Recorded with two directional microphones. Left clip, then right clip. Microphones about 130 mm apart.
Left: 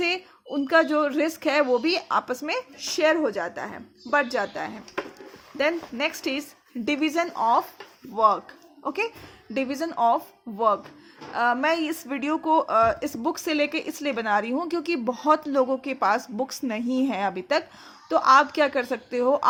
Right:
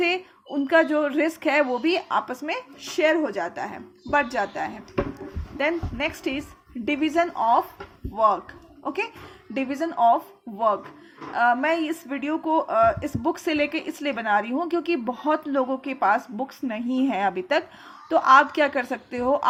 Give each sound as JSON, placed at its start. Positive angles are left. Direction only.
{"t": 0.0, "sound": "a woman's voice", "side_deg": 40}
{"t": 5.5, "sound": "a child's voice", "side_deg": 40}
{"t": 11.3, "sound": "speech", "side_deg": 40}
{"t": 16.4, "sound": "speech", "side_deg": 60}